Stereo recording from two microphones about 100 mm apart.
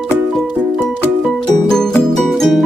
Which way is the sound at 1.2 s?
5° left (ahead or behind).